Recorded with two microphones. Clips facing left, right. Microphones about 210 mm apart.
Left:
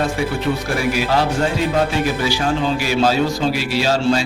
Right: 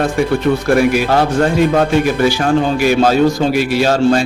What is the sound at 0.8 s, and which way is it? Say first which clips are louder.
A man's voice: right 6 dB; 55° right (ahead or behind).